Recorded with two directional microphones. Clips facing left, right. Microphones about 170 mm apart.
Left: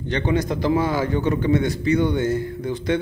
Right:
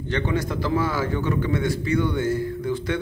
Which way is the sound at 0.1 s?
20° left (ahead or behind).